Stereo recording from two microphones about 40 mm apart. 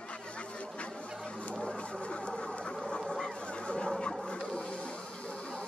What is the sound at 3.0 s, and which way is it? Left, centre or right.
Honk, centre.